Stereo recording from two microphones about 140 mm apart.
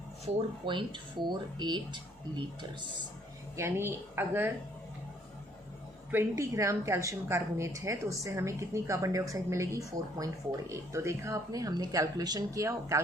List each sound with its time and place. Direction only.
0.6 s speech: 35° right (ahead or behind)
3.6 s speech: 15° right (ahead or behind)
6.1 s a woman's voice: 20° right (ahead or behind)